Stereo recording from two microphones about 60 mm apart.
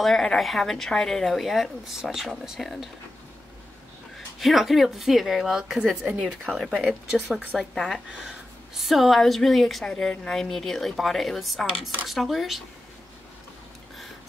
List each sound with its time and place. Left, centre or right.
0.0 s a woman's voice: centre
4.4 s a woman's voice: centre
7.1 s a woman's voice: centre